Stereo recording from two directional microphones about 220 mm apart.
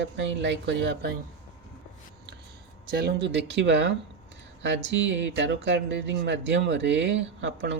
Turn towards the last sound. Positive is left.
turn(degrees=-55)  # may be behind; listen again after turning